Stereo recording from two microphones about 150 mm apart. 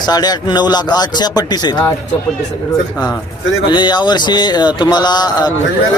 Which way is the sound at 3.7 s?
30° left (ahead or behind).